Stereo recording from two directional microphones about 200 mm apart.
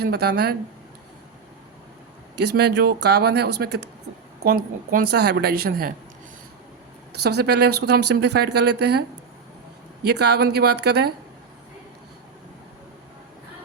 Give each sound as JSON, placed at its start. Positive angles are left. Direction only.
{"t": 0.0, "sound": "a woman's voice", "side_deg": -55}
{"t": 2.4, "sound": "a woman's voice", "side_deg": -55}
{"t": 7.1, "sound": "speech", "side_deg": -55}